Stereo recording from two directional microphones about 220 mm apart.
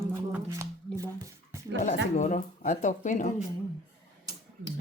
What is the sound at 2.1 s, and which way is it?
Speech, 35° left (ahead or behind).